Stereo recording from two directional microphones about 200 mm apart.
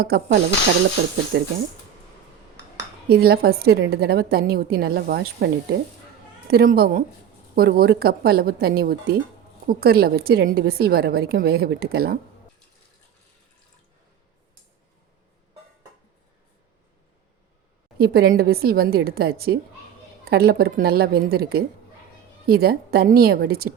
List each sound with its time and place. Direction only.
0.0 s a woman's voice: 50° right (ahead or behind)
1.3 s speech: 60° right (ahead or behind)
3.1 s a woman's voice: 50° right (ahead or behind)
6.5 s a woman's voice: 50° right (ahead or behind)
17.9 s a woman's voice: 50° right (ahead or behind)